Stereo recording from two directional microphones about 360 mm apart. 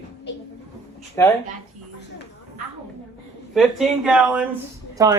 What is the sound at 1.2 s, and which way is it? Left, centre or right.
Speech, centre.